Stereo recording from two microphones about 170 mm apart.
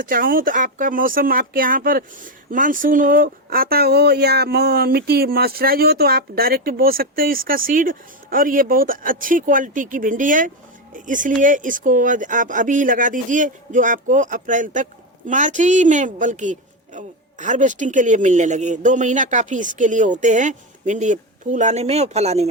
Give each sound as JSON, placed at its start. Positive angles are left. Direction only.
{"t": 0.0, "sound": "a woman's voice", "side_deg": -55}